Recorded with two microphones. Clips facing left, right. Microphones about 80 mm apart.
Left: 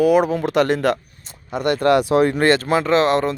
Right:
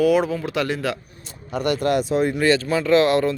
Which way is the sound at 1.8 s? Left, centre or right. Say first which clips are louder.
Left 6 dB; left.